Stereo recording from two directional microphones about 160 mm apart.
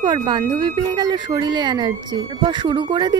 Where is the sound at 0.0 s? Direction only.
30° right (ahead or behind).